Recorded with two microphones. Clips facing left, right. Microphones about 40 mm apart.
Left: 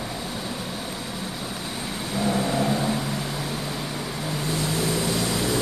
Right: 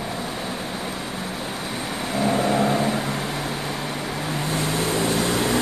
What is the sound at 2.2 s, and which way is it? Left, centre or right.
Vehicle, right.